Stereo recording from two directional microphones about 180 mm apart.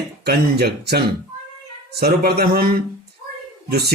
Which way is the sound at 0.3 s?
60° right (ahead or behind).